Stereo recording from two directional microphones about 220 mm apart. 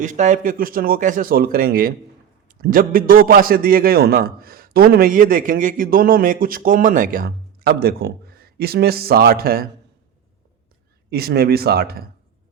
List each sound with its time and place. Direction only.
0.0 s a man's voice: 35° right (ahead or behind)
11.1 s speech: 45° right (ahead or behind)